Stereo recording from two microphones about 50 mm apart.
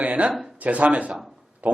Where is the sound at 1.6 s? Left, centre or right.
Right.